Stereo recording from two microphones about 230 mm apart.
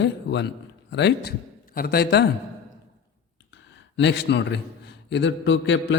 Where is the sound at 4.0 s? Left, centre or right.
Left.